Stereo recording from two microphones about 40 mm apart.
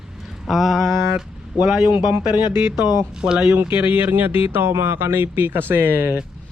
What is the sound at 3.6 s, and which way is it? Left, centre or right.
Speech, right.